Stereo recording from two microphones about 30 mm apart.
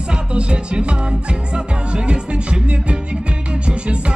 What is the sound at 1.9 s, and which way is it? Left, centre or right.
Music, right.